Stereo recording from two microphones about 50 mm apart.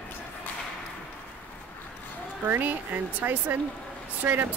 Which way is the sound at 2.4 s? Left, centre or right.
Right.